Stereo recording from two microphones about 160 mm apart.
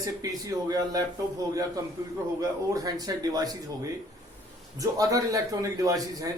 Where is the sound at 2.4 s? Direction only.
20° right (ahead or behind).